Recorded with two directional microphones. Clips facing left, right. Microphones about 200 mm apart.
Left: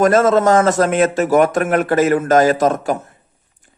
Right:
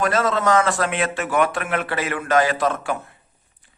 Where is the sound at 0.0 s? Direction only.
45° left (ahead or behind).